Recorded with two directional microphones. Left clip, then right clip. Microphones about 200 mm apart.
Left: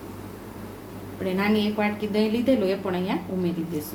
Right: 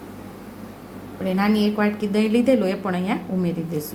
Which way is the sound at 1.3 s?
30° right (ahead or behind).